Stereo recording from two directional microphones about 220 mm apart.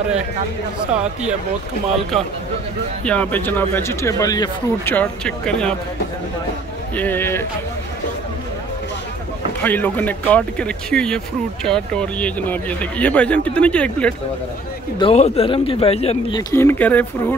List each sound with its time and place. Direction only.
3.1 s speech: 5° left (ahead or behind)
7.0 s speech: 10° left (ahead or behind)
9.6 s speech: 5° left (ahead or behind)
15.0 s speech: 25° left (ahead or behind)
16.5 s speech: 10° left (ahead or behind)